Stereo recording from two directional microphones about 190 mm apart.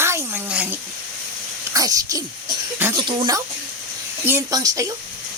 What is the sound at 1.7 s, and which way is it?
Speech, 20° right (ahead or behind).